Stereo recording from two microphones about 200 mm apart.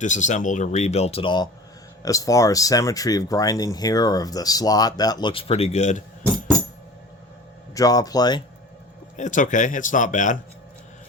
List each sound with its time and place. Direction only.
0.0 s speech: 40° left (ahead or behind)
7.7 s speech: 15° left (ahead or behind)
9.1 s speech: 40° left (ahead or behind)